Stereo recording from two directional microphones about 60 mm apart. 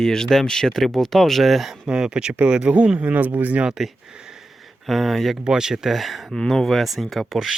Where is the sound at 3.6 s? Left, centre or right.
Centre.